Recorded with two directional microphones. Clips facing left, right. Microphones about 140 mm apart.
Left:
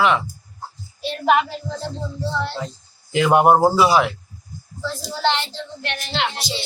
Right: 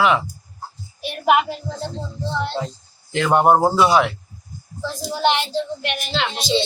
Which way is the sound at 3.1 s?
5° left (ahead or behind).